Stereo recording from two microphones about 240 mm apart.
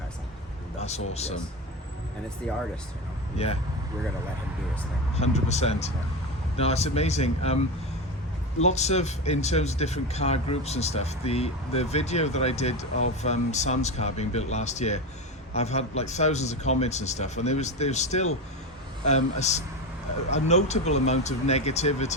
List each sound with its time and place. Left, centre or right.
0.8 s speech: left
3.3 s speech: left
5.1 s speech: left
8.6 s speech: left